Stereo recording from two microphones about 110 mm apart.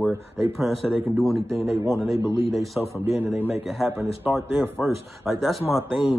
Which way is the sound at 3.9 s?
20° right (ahead or behind).